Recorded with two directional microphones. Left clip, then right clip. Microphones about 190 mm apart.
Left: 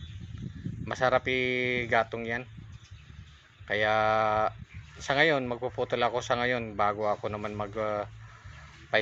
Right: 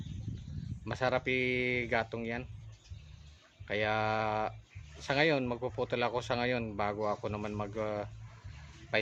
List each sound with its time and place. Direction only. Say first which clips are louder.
0.9 s speech: left 6 dB; 5° right (ahead or behind)
3.7 s speech: left 6 dB; 5° right (ahead or behind)